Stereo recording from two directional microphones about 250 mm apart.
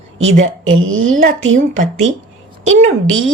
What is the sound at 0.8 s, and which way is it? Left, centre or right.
Speech, right.